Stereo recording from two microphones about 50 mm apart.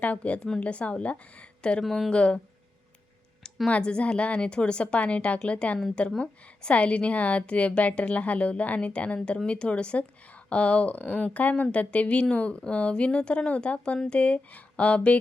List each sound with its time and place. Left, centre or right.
0.0 s speech: left
1.8 s speech: centre
2.0 s speech: left
3.7 s speech: centre